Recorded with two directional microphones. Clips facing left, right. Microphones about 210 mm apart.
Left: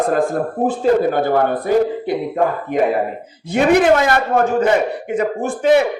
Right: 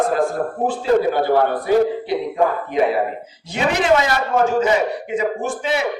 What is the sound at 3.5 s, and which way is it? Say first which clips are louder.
A man's voice: left 5 dB; 55° left (ahead or behind).